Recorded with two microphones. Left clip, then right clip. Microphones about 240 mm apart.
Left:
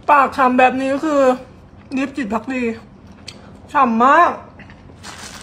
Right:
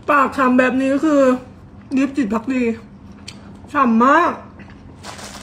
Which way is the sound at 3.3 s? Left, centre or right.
Centre.